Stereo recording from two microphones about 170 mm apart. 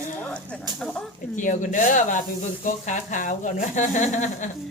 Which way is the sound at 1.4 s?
50° left (ahead or behind).